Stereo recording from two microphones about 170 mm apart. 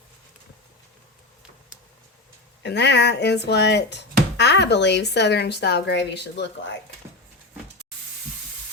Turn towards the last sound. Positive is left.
turn(degrees=90)